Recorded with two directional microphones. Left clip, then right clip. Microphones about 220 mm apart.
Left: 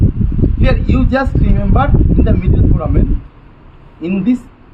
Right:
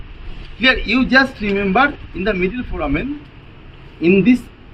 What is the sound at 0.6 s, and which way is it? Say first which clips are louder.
A man's voice: right 5 dB; 15° left (ahead or behind).